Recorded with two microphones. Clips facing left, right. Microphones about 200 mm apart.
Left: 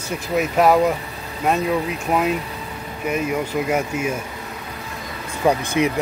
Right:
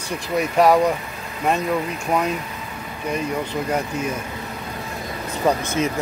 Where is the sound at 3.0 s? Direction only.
10° left (ahead or behind).